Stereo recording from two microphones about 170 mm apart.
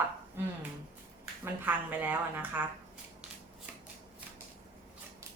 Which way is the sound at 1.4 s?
10° right (ahead or behind).